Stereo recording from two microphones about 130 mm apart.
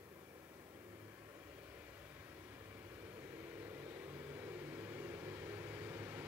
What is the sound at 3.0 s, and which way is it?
Vehicle, 20° right (ahead or behind).